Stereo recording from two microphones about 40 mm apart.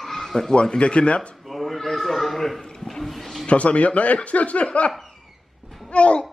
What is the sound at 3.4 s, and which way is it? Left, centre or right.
A man's voice, left.